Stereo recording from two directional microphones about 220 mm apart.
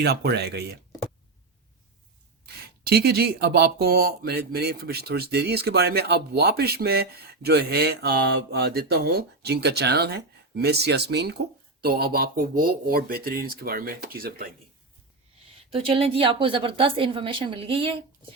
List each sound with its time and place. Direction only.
0.0 s speech: 50° right (ahead or behind)
2.8 s speech: 45° right (ahead or behind)
15.7 s a woman's voice: 25° right (ahead or behind)